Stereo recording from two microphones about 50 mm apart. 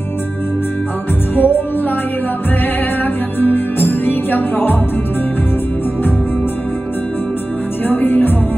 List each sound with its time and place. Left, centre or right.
1.3 s music: left
3.3 s music: left
7.9 s music: left